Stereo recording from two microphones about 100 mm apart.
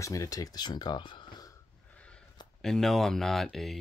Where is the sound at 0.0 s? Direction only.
35° left (ahead or behind); by 1.2 s 50° left (ahead or behind).